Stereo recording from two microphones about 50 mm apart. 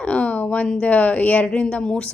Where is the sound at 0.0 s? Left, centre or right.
Left.